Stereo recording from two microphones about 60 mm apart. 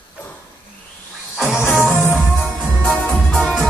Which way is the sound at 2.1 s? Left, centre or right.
Centre.